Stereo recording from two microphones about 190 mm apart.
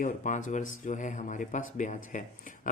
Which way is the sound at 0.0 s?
40° left (ahead or behind).